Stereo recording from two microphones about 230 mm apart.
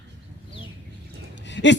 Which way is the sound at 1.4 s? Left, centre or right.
Left.